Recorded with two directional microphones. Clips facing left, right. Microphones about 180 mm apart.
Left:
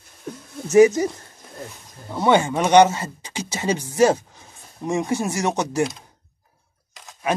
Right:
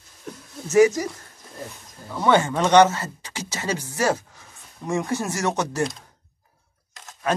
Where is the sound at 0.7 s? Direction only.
25° left (ahead or behind).